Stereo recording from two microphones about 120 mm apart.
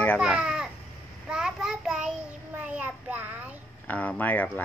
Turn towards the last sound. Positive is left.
turn(degrees=15)  # may be behind; listen again after turning